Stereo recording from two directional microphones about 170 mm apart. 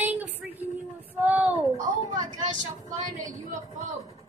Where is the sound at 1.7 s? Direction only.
45° right (ahead or behind).